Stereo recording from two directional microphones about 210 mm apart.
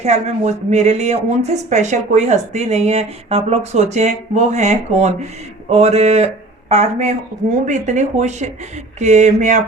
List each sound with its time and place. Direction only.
0.0 s speech: 30° right (ahead or behind)